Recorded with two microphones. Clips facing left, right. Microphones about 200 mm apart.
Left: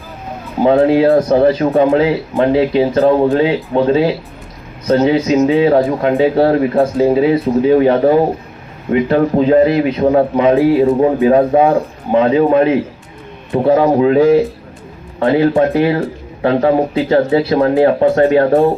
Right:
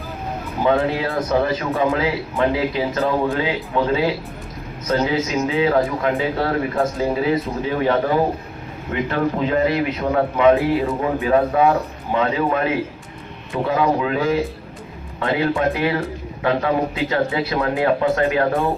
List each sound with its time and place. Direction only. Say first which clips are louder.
0.6 s a man's voice: left 9 dB; 35° left (ahead or behind)